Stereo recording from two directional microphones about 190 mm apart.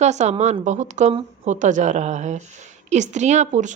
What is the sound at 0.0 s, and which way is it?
A woman's voice, 35° right (ahead or behind).